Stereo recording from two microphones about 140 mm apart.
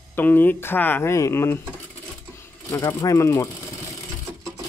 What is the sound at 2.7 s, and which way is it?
Speech, 25° left (ahead or behind).